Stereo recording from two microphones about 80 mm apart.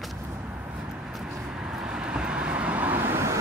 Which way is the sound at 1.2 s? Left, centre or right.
Centre.